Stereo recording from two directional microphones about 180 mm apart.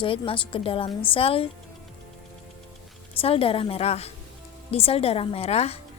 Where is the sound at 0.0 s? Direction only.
30° left (ahead or behind).